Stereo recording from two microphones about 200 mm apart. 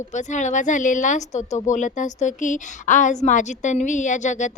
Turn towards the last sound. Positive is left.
turn(degrees=35)  # may be behind; listen again after turning